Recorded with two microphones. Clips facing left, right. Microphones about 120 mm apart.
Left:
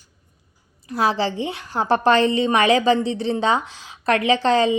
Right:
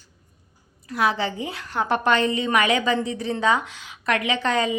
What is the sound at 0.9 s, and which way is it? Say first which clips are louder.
A woman's voice: left 3 dB; 30° left (ahead or behind).